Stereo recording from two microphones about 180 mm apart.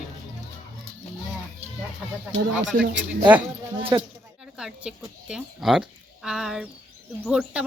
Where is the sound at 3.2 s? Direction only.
10° right (ahead or behind).